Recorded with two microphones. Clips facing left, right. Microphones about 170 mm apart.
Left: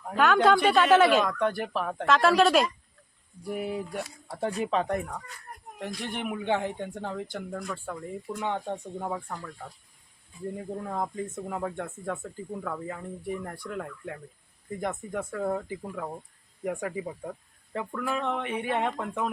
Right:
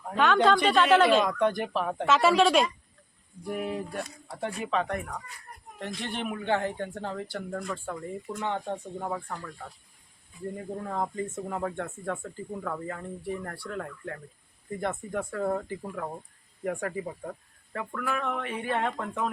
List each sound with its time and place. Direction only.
0.1 s speech: 5° left (ahead or behind)
4.4 s speech: 35° left (ahead or behind)
5.8 s speech: 10° left (ahead or behind)